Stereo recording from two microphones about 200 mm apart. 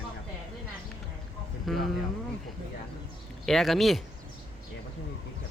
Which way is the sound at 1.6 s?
Centre (ahead or behind).